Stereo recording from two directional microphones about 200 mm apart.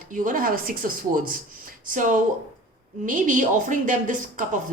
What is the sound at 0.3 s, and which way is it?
Speech, 45° right (ahead or behind).